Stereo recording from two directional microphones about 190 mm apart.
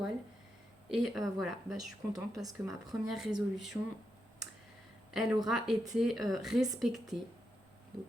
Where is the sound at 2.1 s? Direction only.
20° right (ahead or behind).